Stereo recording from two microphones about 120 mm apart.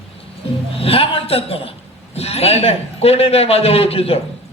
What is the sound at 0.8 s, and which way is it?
A man's voice, 55° left (ahead or behind).